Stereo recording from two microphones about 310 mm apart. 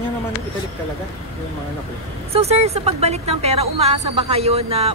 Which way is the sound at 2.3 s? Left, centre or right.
Centre.